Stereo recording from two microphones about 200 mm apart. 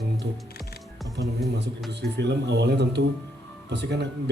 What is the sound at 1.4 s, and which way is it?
Speech, 55° right (ahead or behind).